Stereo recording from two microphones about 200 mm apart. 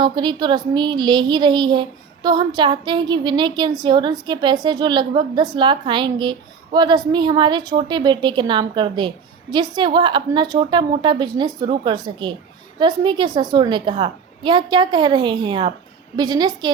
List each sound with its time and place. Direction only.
0.0 s speech: 25° right (ahead or behind)